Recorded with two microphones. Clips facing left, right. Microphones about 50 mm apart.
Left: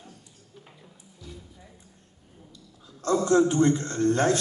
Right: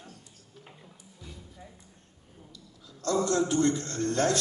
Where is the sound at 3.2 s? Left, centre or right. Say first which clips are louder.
Left 6 dB; left.